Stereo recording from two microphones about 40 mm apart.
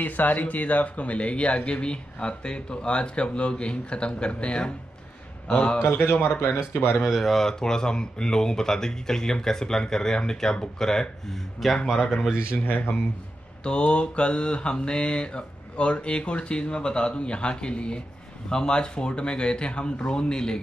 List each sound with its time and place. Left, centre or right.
0.0 s speech: left
1.7 s mantra: left
5.8 s a man's voice: left
6.7 s speech: left
7.1 s speech: centre
7.4 s speech: centre
11.9 s speech: centre
12.6 s speech: left
13.7 s mantra: left